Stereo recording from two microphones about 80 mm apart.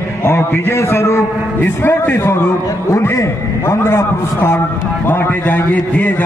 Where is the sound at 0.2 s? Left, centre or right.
Left.